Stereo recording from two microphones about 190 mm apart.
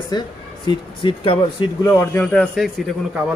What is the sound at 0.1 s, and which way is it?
A man's voice, 20° left (ahead or behind).